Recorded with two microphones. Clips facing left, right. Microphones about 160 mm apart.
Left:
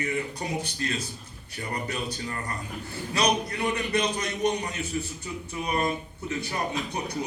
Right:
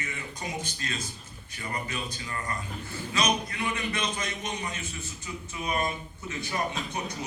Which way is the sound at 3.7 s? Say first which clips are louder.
Left 5 dB; 35° left (ahead or behind).